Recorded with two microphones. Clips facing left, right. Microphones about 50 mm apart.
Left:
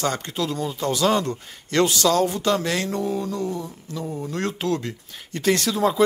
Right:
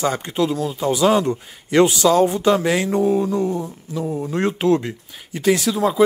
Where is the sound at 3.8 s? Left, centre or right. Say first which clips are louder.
Right 6 dB; centre.